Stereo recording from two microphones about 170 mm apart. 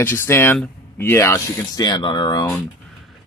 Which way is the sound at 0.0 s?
15° left (ahead or behind).